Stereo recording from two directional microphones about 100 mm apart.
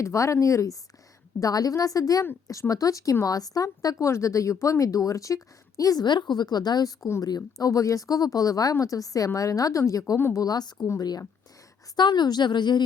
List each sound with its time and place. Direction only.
0.0 s a woman's voice: 30° left (ahead or behind)
10.4 s a woman's voice: 40° left (ahead or behind)